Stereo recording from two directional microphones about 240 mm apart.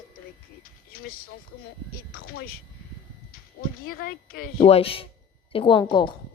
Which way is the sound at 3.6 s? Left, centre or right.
Left.